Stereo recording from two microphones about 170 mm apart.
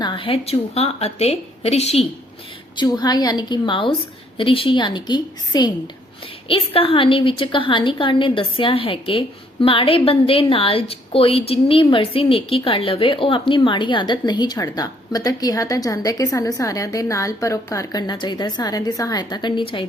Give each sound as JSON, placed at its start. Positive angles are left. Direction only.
{"t": 0.0, "sound": "speech", "side_deg": 30}
{"t": 2.7, "sound": "a woman's voice", "side_deg": 25}